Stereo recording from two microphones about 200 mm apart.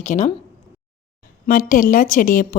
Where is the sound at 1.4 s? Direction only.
40° left (ahead or behind).